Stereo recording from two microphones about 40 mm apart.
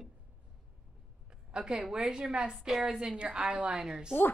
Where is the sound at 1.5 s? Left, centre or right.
Centre.